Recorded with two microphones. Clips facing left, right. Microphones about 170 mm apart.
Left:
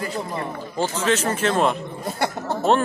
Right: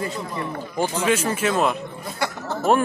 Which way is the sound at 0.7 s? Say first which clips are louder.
Even; 10° right (ahead or behind).